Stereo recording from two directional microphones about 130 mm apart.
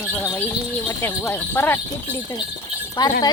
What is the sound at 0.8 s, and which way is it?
Speech, 20° left (ahead or behind).